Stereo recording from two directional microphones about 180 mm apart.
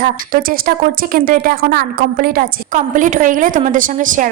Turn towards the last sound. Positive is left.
turn(degrees=-45)  # may be behind; listen again after turning